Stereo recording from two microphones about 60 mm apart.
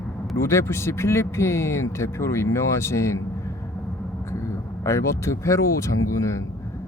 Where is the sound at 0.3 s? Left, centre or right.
Left.